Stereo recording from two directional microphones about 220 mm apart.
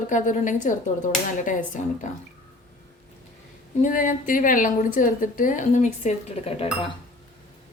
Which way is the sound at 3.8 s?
35° left (ahead or behind).